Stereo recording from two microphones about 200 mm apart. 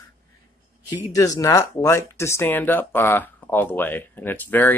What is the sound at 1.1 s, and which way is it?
Speech, 15° left (ahead or behind).